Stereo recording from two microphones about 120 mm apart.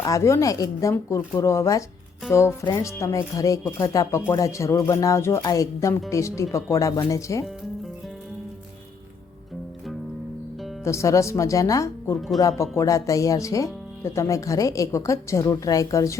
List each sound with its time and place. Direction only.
0.0 s speech: 25° left (ahead or behind)
10.8 s speech: 25° left (ahead or behind)